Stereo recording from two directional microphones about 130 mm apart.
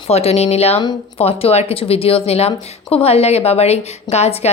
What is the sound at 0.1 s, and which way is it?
A woman's voice, 55° left (ahead or behind).